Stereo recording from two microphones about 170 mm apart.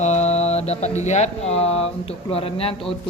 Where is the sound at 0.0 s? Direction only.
40° left (ahead or behind).